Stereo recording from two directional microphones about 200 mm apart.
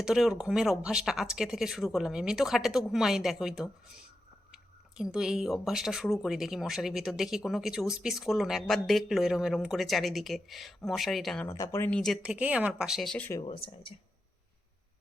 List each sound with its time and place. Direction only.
0.0 s speech: centre (ahead or behind)
11.4 s speech: 15° left (ahead or behind)
13.4 s speech: 25° left (ahead or behind)